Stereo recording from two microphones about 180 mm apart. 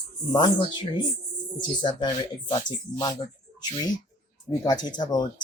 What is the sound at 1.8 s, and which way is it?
Speech, 25° left (ahead or behind).